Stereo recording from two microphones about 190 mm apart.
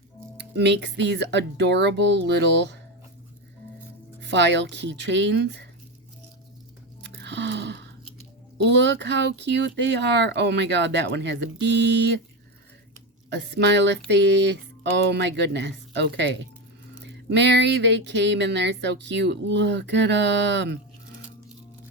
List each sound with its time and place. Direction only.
0.3 s speech: 65° right (ahead or behind)
4.2 s speech: 65° right (ahead or behind)
7.0 s a sound: 65° right (ahead or behind)
8.5 s speech: 65° right (ahead or behind)
13.3 s speech: 65° right (ahead or behind)